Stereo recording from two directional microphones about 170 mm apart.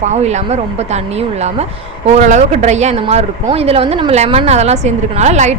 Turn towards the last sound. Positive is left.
turn(degrees=-40)  # may be behind; listen again after turning